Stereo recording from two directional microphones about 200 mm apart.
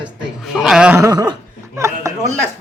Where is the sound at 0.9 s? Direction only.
15° right (ahead or behind).